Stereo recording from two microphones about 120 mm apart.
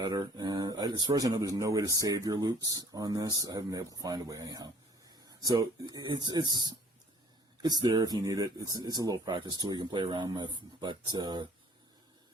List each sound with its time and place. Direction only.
0.0 s speech: 35° right (ahead or behind)
7.6 s speech: 35° right (ahead or behind)